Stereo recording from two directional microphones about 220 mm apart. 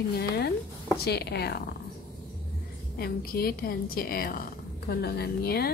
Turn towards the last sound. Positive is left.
turn(degrees=45)  # may be behind; listen again after turning